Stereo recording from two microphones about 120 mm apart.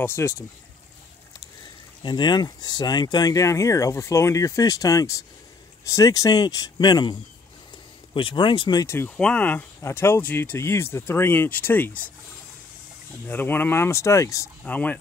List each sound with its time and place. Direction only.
0.0 s speech: 20° left (ahead or behind)
2.0 s speech: 40° left (ahead or behind)
8.1 s speech: 45° left (ahead or behind)
8.8 s speech: 20° left (ahead or behind)
13.3 s speech: 15° left (ahead or behind)
14.6 s speech: 15° left (ahead or behind)